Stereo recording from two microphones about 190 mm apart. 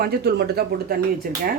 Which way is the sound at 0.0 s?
55° right (ahead or behind).